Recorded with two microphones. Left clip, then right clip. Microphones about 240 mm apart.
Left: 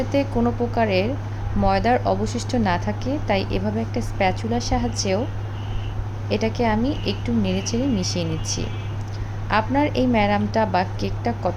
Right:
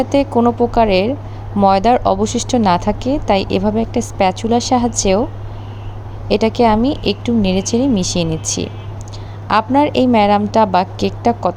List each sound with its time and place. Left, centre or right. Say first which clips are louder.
0.1 s speech: right 8 dB; right
6.2 s speech: right 9 dB; right